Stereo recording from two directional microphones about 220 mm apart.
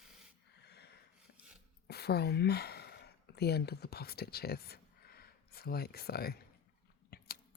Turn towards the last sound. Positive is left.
turn(degrees=45)  # may be behind; listen again after turning